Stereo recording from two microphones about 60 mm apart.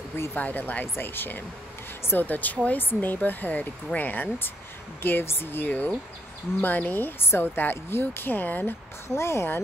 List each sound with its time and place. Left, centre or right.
0.3 s speech: left
9.1 s speech: left